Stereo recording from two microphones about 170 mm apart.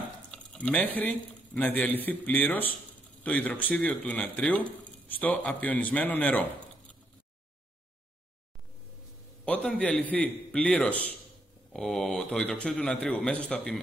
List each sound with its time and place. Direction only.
0.3 s speech: 5° left (ahead or behind)
9.4 s a man's voice: 5° left (ahead or behind)